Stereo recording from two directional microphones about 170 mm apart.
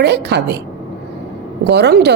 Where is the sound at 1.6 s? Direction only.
75° right (ahead or behind).